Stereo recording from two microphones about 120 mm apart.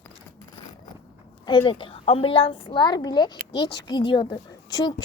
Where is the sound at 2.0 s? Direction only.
55° left (ahead or behind).